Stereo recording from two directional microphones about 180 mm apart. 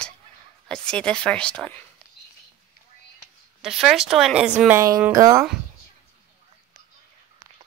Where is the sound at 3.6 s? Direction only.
5° right (ahead or behind); by 5.4 s 20° right (ahead or behind).